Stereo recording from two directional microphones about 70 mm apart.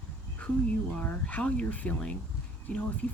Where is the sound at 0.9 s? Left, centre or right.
Centre.